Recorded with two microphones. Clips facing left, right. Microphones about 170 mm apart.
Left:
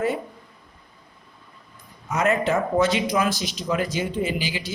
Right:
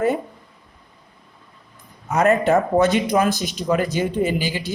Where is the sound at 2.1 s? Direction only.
50° right (ahead or behind).